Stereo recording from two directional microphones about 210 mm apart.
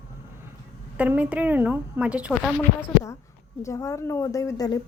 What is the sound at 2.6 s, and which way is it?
A woman's voice, 10° left (ahead or behind).